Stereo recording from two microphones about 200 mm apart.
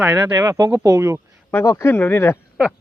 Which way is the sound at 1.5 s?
15° left (ahead or behind).